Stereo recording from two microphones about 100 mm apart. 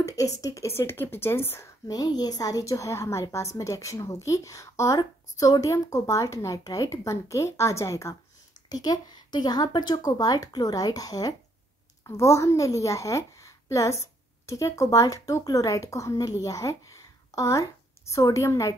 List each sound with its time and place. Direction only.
0.0 s speech: 35° left (ahead or behind)
1.9 s a woman's voice: 40° left (ahead or behind)